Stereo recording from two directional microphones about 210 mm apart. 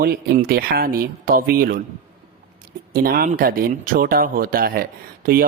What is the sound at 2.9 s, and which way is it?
Speech, 45° right (ahead or behind).